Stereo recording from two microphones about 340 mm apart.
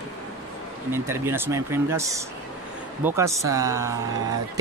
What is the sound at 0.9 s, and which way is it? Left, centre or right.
Speech, centre.